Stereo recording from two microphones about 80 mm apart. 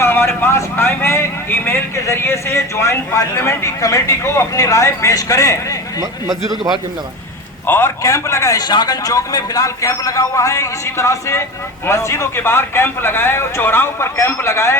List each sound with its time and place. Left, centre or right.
0.0 s a man's voice: left
7.7 s a man's voice: left
8.5 s a man's voice: left